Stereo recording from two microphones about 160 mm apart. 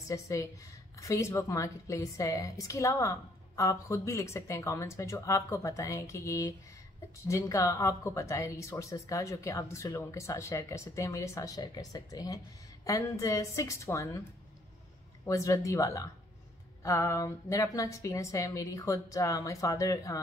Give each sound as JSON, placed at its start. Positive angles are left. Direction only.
{"t": 0.1, "sound": "a woman's voice", "side_deg": 20}
{"t": 15.2, "sound": "a woman's voice", "side_deg": 20}